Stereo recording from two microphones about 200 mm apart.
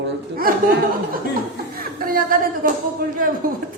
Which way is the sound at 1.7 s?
45° right (ahead or behind).